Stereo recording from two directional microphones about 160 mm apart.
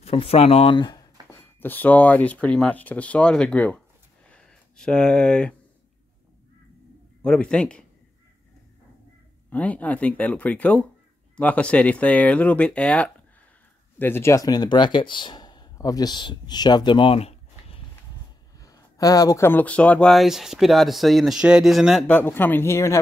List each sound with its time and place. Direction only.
0.0 s speech: 40° left (ahead or behind)
1.6 s speech: 10° left (ahead or behind)
4.3 s a sound: 5° left (ahead or behind)
7.2 s speech: 5° left (ahead or behind)
9.5 s speech: 10° left (ahead or behind); by 17.8 s 40° left (ahead or behind)
18.6 s speech: 20° left (ahead or behind)